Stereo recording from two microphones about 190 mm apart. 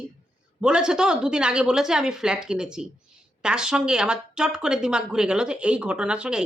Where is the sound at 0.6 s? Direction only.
5° right (ahead or behind).